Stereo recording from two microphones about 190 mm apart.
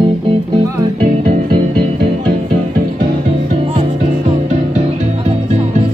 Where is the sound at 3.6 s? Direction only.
30° right (ahead or behind).